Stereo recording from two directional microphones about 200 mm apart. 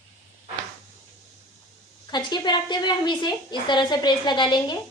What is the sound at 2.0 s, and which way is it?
A woman's voice, 20° left (ahead or behind).